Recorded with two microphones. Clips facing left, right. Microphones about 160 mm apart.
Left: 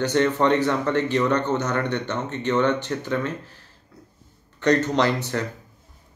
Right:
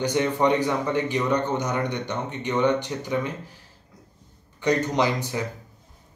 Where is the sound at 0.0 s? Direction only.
15° right (ahead or behind).